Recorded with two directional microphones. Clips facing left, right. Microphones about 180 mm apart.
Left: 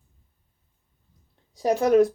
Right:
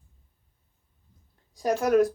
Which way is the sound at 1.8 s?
25° left (ahead or behind).